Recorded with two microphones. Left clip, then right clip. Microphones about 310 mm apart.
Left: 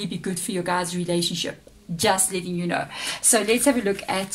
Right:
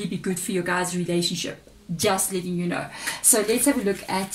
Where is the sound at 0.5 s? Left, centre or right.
Centre.